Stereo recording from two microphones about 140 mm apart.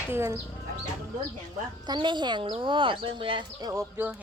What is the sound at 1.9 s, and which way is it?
Speech, 35° right (ahead or behind).